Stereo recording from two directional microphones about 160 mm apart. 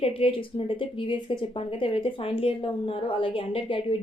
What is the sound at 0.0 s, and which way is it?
Speech, 35° left (ahead or behind).